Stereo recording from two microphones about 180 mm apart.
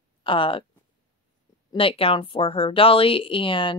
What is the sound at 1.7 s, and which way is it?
Speech, 30° left (ahead or behind).